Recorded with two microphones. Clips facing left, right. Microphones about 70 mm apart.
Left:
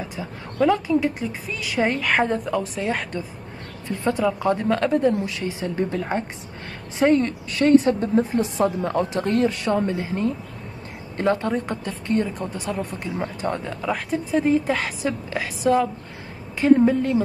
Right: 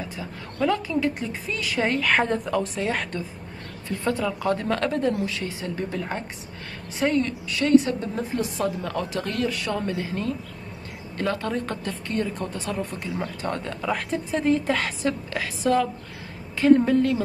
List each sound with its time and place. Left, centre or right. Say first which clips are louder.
0.1 s a woman's voice: left 2 dB; centre
4.0 s a woman's voice: left 4 dB; centre
7.0 s a woman's voice: left 5 dB; left
13.7 s a woman's voice: left 2 dB; centre